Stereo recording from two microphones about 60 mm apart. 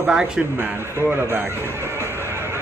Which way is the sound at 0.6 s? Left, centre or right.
Right.